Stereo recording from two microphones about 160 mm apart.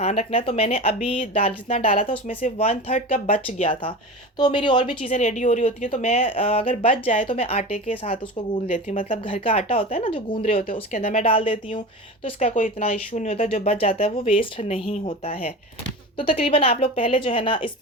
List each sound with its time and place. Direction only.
0.0 s a woman's voice: 45° left (ahead or behind)
4.9 s a woman's voice: 45° left (ahead or behind)
8.6 s speech: 50° left (ahead or behind)
9.0 s a woman's voice: 35° left (ahead or behind)